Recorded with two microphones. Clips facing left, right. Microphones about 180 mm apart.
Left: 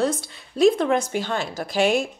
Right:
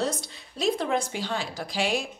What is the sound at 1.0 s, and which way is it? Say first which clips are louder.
A woman's voice: left 5 dB; 50° left (ahead or behind).